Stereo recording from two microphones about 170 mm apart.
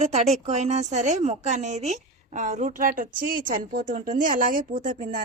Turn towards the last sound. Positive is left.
turn(degrees=-50)  # may be behind; listen again after turning